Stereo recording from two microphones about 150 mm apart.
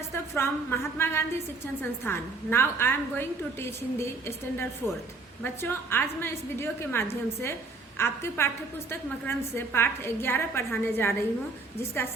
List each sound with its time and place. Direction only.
0.3 s a woman's voice: 15° left (ahead or behind)